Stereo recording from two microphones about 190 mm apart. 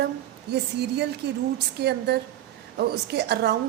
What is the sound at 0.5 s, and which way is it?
A woman's voice, 60° right (ahead or behind).